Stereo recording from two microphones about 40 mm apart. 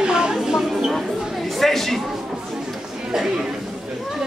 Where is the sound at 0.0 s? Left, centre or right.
Centre.